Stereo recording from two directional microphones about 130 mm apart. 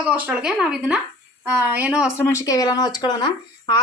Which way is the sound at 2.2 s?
20° left (ahead or behind).